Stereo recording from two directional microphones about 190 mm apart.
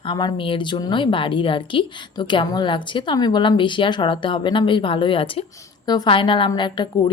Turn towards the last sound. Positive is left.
turn(degrees=25)  # may be behind; listen again after turning